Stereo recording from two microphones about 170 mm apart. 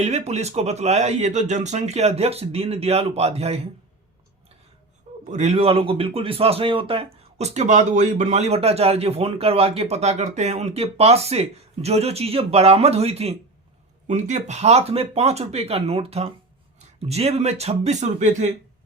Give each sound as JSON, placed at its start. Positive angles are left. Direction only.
{"t": 0.0, "sound": "speech", "side_deg": -40}
{"t": 5.2, "sound": "speech", "side_deg": -45}